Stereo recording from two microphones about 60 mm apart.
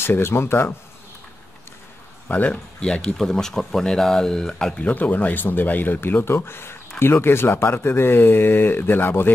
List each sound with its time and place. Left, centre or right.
0.0 s speech: left
2.2 s speech: left
2.9 s speech: centre
4.8 s speech: left